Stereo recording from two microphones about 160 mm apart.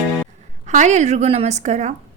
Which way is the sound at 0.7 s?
50° right (ahead or behind).